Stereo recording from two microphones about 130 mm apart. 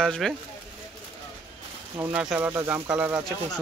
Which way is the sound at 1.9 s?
15° right (ahead or behind).